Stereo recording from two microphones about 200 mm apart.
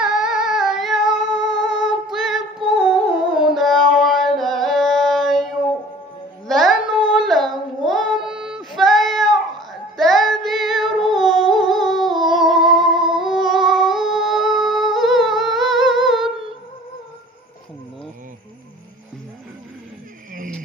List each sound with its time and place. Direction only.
0.0 s singing: centre (ahead or behind)
1.3 s music: 65° left (ahead or behind)
2.0 s child singing: centre (ahead or behind)
2.6 s music: 25° right (ahead or behind)
3.3 s singing: centre (ahead or behind)
6.5 s carnatic music: centre (ahead or behind)
7.1 s child singing: centre (ahead or behind)